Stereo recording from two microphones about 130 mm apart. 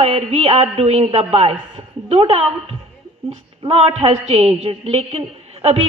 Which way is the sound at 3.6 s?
50° right (ahead or behind).